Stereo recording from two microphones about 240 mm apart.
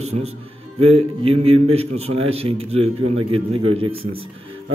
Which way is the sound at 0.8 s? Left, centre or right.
Right.